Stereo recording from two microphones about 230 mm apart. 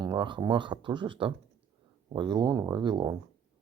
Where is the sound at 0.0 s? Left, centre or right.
Centre.